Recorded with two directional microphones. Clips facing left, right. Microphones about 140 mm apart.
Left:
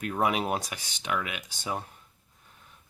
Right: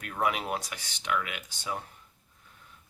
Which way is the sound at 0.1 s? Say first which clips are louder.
Left 2 dB; 20° left (ahead or behind).